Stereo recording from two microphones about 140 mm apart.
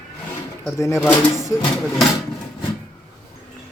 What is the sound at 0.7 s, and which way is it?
Speech, 20° left (ahead or behind).